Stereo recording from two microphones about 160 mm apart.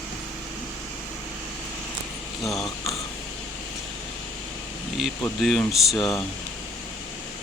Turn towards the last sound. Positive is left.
turn(degrees=0)  # may be behind; listen again after turning